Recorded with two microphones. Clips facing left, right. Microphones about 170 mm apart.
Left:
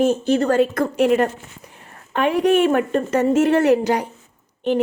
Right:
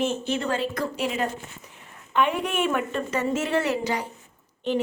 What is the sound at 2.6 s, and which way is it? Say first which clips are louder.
A woman's voice: left 8 dB; 50° left (ahead or behind).